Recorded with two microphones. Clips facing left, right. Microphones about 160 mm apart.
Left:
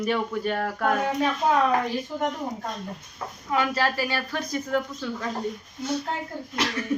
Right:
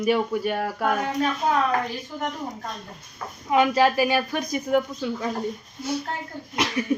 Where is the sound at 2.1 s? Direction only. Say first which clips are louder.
Left 2 dB; 20° left (ahead or behind).